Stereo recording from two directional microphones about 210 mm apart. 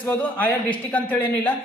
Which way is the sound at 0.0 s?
5° left (ahead or behind).